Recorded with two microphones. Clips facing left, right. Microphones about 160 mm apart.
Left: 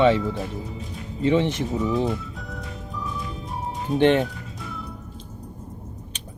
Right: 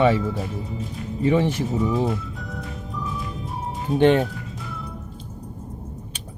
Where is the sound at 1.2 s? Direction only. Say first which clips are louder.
Even; 20° left (ahead or behind).